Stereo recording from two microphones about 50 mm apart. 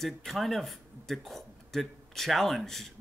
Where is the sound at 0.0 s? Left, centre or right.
Centre.